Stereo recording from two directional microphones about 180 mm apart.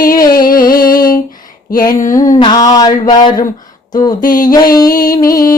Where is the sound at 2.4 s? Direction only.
20° left (ahead or behind).